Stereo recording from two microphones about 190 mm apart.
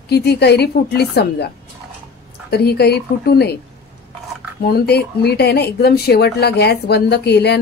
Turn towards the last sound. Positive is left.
turn(degrees=60)  # may be behind; listen again after turning